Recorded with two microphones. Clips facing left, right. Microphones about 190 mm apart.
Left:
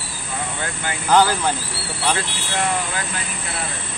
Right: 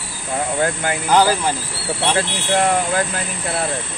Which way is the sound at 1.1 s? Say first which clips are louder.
Right 1 dB; 10° right (ahead or behind).